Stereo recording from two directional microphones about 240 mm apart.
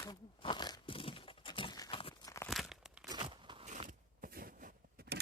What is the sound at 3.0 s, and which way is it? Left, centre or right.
Biting, centre.